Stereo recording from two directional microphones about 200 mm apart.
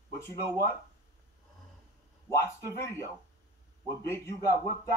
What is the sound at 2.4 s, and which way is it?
Speech, 15° left (ahead or behind).